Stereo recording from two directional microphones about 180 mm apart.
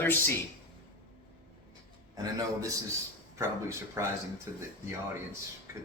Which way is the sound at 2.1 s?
20° right (ahead or behind).